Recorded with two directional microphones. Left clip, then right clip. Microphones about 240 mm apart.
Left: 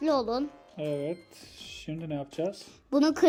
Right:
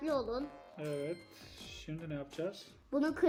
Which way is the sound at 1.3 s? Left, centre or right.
Left.